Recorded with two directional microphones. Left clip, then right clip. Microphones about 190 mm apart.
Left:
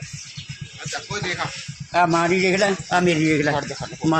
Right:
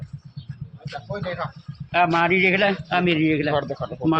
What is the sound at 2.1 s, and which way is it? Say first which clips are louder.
A man's voice: even; 35° left (ahead or behind).